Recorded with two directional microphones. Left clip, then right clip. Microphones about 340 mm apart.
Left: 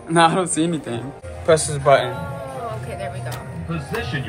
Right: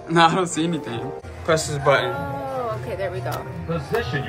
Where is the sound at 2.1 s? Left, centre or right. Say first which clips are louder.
Right 3 dB; right.